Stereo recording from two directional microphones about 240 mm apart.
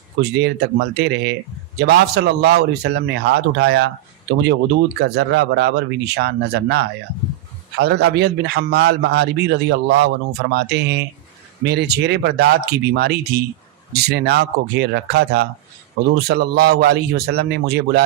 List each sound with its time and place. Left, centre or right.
0.2 s a man's voice: right
5.0 s a man's voice: right